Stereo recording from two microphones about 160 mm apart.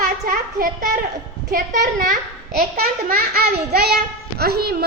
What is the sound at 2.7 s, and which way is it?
A child's voice, 70° right (ahead or behind).